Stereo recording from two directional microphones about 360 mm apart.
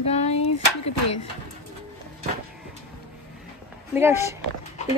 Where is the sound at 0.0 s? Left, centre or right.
Centre.